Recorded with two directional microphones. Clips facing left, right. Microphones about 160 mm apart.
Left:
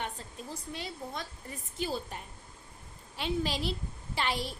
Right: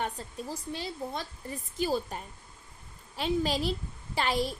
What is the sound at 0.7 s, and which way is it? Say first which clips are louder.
A woman's voice: right 3 dB; 35° right (ahead or behind).